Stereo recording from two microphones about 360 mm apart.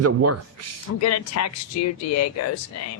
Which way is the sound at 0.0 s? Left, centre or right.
Right.